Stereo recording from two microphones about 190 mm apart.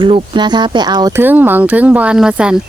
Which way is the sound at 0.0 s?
25° right (ahead or behind).